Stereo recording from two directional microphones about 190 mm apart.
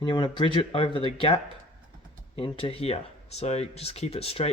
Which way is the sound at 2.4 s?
30° left (ahead or behind).